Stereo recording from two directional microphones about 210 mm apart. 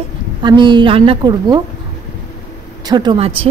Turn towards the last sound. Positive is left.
turn(degrees=-25)  # may be behind; listen again after turning